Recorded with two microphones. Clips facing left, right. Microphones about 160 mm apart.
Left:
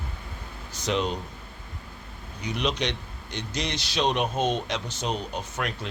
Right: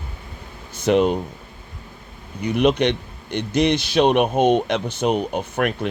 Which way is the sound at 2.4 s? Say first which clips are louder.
Right 10 dB; 55° right (ahead or behind).